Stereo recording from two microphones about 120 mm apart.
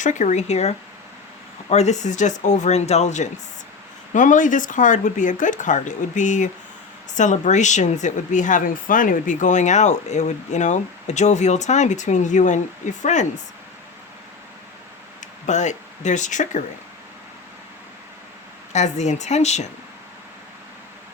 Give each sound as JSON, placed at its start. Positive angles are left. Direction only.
{"t": 0.0, "sound": "speech", "side_deg": 90}
{"t": 4.1, "sound": "a woman's voice", "side_deg": 90}
{"t": 15.2, "sound": "speech", "side_deg": 80}
{"t": 18.7, "sound": "speech", "side_deg": 75}